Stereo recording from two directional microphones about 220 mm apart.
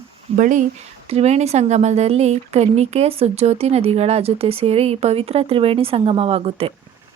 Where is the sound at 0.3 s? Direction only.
35° right (ahead or behind).